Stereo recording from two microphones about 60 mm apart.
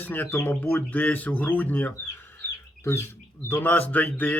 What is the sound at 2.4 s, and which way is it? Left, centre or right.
Chicken, left.